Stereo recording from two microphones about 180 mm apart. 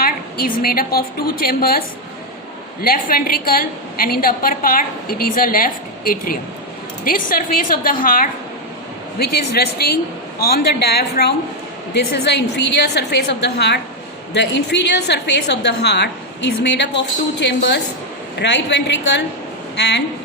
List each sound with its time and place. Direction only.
0.0 s a woman's voice: 55° left (ahead or behind)
2.8 s a woman's voice: 55° left (ahead or behind); by 20.0 s 70° left (ahead or behind)